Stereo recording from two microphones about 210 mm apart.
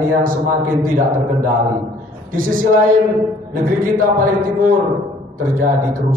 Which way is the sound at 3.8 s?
40° right (ahead or behind).